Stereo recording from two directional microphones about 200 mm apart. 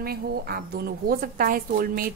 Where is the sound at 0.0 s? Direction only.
50° right (ahead or behind).